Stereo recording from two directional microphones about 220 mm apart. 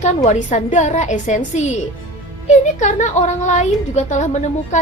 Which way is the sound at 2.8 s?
30° left (ahead or behind).